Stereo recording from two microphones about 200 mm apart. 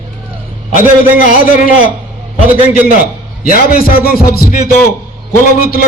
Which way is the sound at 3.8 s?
45° left (ahead or behind).